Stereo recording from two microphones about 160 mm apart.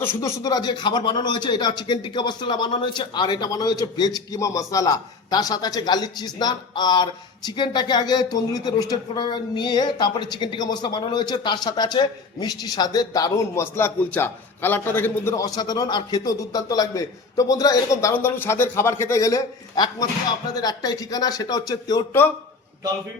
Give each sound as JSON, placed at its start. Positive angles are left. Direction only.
{"t": 0.0, "sound": "speech", "side_deg": 15}